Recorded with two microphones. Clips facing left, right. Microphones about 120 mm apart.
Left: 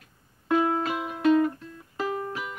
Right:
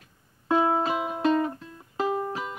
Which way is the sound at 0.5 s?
30° right (ahead or behind).